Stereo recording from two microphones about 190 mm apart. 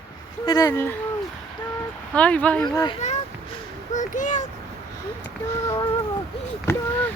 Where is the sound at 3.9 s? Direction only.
40° left (ahead or behind).